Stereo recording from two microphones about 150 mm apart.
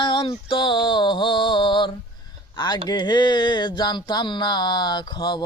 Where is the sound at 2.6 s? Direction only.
30° left (ahead or behind).